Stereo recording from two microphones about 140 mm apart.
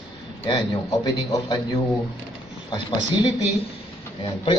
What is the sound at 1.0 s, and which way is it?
Speech, 30° left (ahead or behind).